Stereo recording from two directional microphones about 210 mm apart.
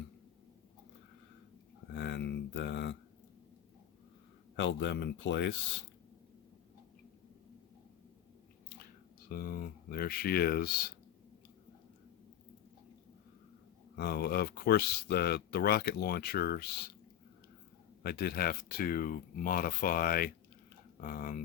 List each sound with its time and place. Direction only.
1.9 s a sound: 55° left (ahead or behind)
4.5 s speech: 60° left (ahead or behind)
9.3 s speech: 45° left (ahead or behind)
13.9 s speech: 50° left (ahead or behind)
18.0 s speech: 50° left (ahead or behind)